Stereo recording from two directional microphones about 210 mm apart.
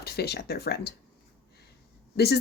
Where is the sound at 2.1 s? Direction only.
50° left (ahead or behind).